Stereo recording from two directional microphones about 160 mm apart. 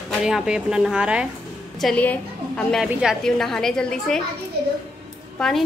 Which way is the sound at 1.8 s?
5° left (ahead or behind).